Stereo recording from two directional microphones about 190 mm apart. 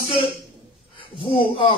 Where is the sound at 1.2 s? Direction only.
25° left (ahead or behind).